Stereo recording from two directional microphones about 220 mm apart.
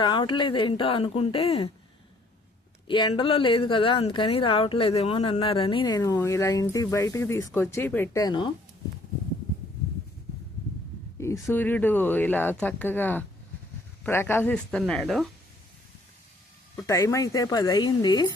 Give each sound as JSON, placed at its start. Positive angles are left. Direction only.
{"t": 0.0, "sound": "speech", "side_deg": 20}
{"t": 2.8, "sound": "speech", "side_deg": 20}
{"t": 11.2, "sound": "speech", "side_deg": 10}
{"t": 16.7, "sound": "speech", "side_deg": 10}